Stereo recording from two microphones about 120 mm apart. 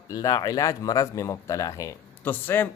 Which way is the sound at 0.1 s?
30° left (ahead or behind).